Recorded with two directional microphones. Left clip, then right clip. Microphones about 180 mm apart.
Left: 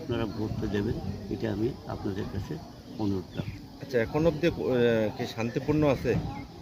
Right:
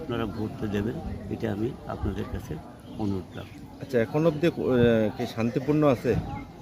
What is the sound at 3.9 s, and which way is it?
Speech, 55° right (ahead or behind).